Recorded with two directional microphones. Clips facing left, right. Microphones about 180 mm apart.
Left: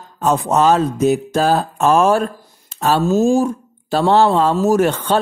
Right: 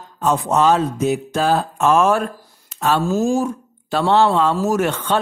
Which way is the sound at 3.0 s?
25° left (ahead or behind).